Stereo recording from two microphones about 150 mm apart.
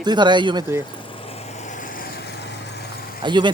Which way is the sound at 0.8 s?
35° left (ahead or behind).